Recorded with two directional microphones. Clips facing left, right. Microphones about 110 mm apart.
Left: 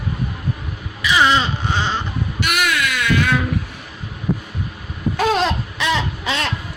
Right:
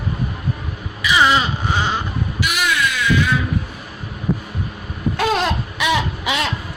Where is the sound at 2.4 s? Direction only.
55° left (ahead or behind).